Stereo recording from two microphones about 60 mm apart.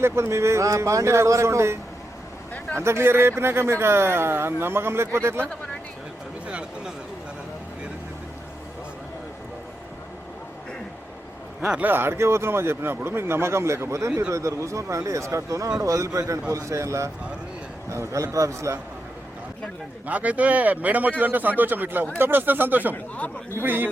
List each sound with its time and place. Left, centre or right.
0.0 s speech: right
6.5 s a sound: centre
11.8 s speech: right
20.1 s speech: right